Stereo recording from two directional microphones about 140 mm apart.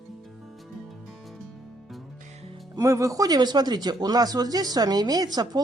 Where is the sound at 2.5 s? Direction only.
25° right (ahead or behind).